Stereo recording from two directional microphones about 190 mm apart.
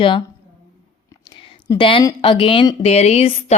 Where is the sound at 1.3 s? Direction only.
25° left (ahead or behind).